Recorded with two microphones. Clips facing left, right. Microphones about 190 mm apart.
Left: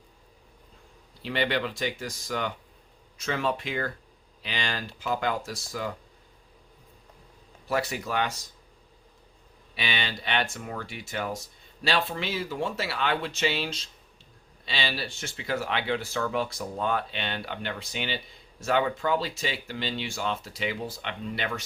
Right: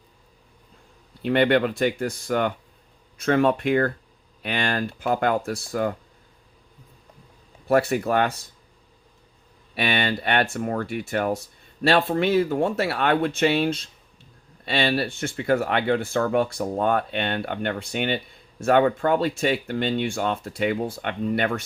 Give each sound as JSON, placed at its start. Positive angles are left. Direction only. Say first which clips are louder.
{"t": 1.2, "sound": "speech", "louder": "right 9 dB", "side_deg": -55}
{"t": 7.7, "sound": "speech", "louder": "right 9 dB", "side_deg": -55}
{"t": 9.7, "sound": "speech", "louder": "right 8 dB", "side_deg": -55}